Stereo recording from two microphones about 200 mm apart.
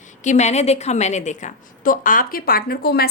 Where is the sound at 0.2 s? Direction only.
35° left (ahead or behind).